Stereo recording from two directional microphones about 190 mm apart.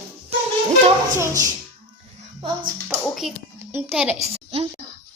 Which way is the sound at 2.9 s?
Centre (ahead or behind).